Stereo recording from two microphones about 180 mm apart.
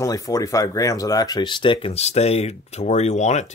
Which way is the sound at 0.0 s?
20° left (ahead or behind).